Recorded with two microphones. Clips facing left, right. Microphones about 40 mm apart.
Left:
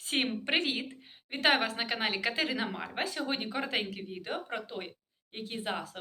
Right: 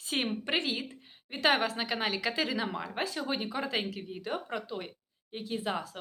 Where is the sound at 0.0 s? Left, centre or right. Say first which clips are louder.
Left 1 dB; left.